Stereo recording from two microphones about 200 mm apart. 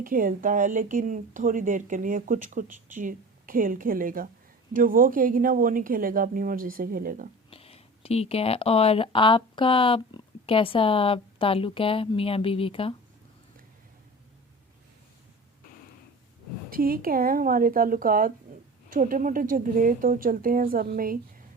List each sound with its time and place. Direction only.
0.0 s a woman's voice: 45° right (ahead or behind)
7.5 s speech: 30° left (ahead or behind)
16.6 s a woman's voice: 45° right (ahead or behind)